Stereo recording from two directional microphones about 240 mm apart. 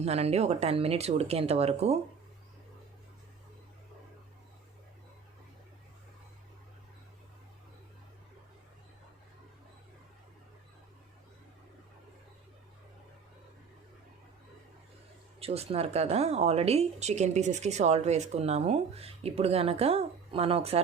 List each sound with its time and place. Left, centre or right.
0.0 s speech: right
15.4 s speech: right